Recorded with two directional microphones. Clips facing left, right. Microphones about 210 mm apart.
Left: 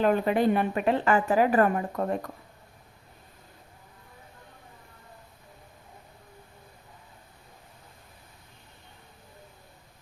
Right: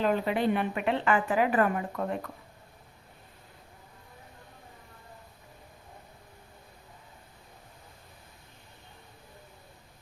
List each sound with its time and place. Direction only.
0.0 s a woman's voice: 50° left (ahead or behind)